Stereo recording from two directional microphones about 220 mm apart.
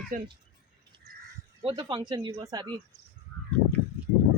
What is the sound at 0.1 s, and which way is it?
Speech, 40° right (ahead or behind).